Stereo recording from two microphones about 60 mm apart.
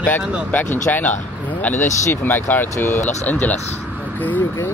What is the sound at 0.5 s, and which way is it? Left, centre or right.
Speech, left.